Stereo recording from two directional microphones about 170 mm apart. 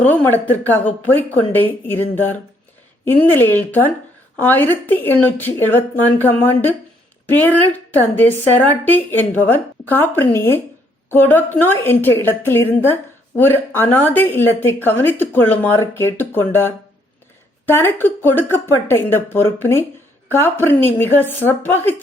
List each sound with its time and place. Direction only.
0.0 s a woman's voice: 10° left (ahead or behind)